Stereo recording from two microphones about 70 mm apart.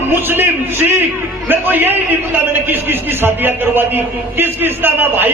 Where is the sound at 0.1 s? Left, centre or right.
Right.